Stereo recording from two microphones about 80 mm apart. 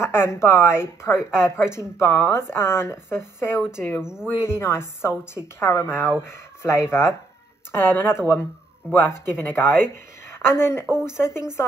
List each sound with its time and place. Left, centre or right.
0.0 s a woman's voice: left
4.0 s speech: centre
4.4 s a woman's voice: left